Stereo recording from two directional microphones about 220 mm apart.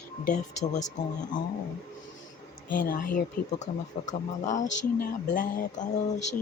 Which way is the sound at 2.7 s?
40° left (ahead or behind).